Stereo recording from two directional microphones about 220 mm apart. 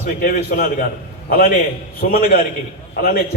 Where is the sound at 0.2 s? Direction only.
40° left (ahead or behind).